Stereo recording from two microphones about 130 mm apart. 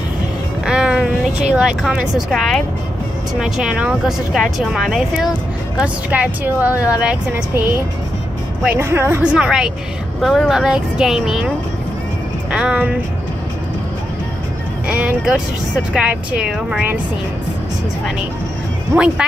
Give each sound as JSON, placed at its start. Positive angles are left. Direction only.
{"t": 0.7, "sound": "speech", "side_deg": -5}
{"t": 14.9, "sound": "speech", "side_deg": -10}
{"t": 18.9, "sound": "speech", "side_deg": -20}